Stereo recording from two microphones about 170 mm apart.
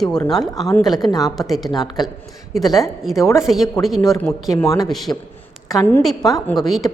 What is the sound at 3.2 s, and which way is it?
Speech, 20° left (ahead or behind).